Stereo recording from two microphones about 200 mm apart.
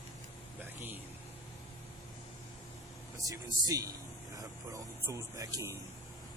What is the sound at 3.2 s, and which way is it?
Speech, 15° right (ahead or behind).